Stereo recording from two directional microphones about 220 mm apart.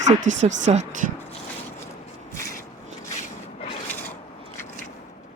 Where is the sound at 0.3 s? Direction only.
35° right (ahead or behind).